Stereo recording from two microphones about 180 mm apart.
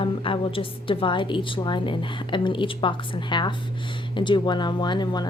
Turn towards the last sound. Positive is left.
turn(degrees=25)  # may be behind; listen again after turning